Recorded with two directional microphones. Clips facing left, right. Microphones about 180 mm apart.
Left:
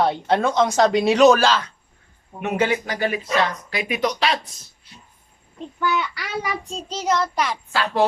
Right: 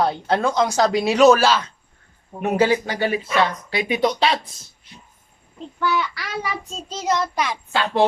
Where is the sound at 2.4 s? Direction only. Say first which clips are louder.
Right 3 dB; 30° right (ahead or behind).